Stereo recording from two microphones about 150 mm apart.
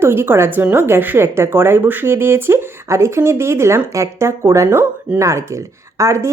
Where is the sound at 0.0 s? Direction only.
15° right (ahead or behind).